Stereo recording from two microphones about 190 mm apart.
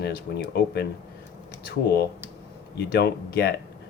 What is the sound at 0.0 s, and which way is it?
Speech, 60° left (ahead or behind).